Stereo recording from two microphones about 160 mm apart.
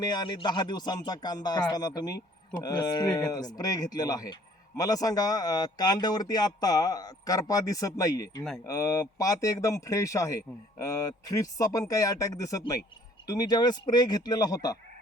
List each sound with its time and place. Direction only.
0.0 s speech: 25° left (ahead or behind)